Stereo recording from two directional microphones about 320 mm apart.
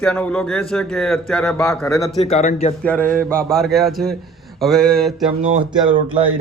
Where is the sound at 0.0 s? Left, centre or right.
Centre.